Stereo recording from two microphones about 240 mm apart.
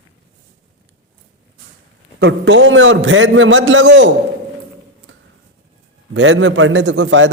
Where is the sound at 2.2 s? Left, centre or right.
Right.